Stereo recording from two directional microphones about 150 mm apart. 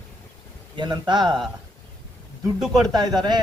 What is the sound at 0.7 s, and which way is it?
Speech, 30° right (ahead or behind).